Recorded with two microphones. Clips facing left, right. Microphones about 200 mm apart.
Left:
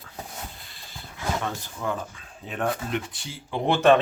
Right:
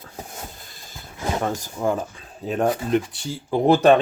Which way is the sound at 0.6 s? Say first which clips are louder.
Right 3 dB; 45° right (ahead or behind).